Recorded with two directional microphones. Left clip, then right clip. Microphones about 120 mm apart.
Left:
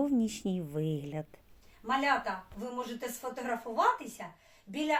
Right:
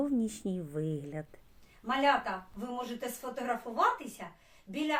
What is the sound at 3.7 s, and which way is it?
Speech, 15° right (ahead or behind).